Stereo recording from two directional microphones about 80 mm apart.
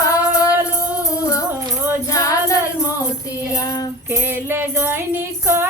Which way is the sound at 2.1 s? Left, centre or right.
Left.